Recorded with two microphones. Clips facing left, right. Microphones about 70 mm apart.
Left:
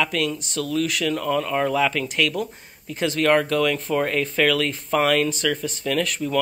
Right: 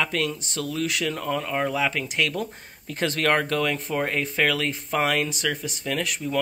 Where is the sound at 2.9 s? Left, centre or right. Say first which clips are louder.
Left 3 dB; right.